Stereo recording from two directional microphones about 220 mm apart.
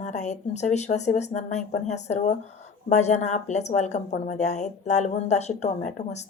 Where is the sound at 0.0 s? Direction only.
35° left (ahead or behind).